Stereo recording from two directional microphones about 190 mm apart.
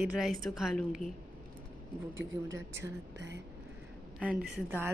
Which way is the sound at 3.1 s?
65° right (ahead or behind).